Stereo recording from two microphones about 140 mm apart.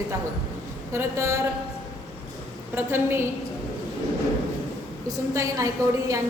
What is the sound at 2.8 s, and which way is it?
Speech, 15° right (ahead or behind).